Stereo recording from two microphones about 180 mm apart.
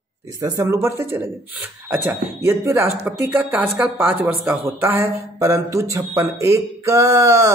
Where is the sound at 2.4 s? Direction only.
15° right (ahead or behind).